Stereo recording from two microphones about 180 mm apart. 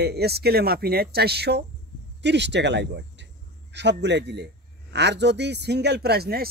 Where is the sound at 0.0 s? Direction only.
65° right (ahead or behind).